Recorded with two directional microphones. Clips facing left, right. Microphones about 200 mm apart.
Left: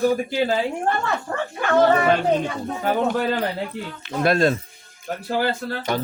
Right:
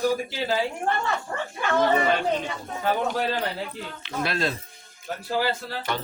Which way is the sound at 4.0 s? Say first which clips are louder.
Left 9 dB; 50° left (ahead or behind).